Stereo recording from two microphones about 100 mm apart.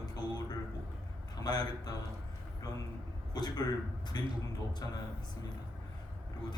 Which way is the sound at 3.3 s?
40° left (ahead or behind).